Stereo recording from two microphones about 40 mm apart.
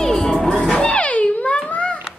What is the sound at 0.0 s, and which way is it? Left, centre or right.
Music, centre.